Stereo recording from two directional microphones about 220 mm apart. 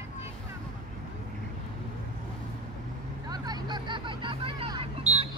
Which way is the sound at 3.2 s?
20° right (ahead or behind).